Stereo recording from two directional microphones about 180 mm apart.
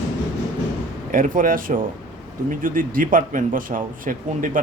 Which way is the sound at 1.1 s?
50° right (ahead or behind).